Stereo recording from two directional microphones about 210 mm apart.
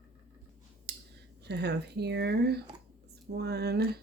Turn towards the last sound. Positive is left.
turn(degrees=-50)  # may be behind; listen again after turning